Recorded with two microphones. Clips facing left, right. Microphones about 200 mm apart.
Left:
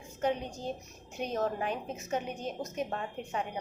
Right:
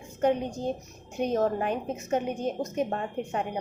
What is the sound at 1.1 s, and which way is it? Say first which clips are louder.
A woman's voice: right 7 dB; 50° right (ahead or behind).